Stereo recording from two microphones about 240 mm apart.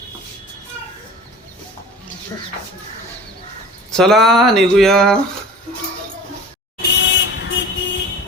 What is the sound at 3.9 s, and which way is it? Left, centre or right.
Speech, centre.